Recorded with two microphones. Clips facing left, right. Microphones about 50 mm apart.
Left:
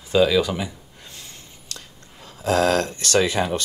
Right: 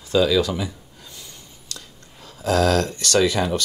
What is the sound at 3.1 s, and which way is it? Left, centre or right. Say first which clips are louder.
Speech: right 1 dB; left.